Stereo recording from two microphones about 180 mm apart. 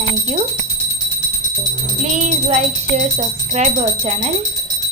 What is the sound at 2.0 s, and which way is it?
Speech, 40° right (ahead or behind).